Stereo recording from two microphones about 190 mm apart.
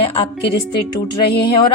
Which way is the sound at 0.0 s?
30° left (ahead or behind).